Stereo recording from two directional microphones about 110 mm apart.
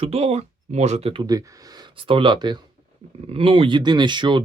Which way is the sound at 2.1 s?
50° right (ahead or behind).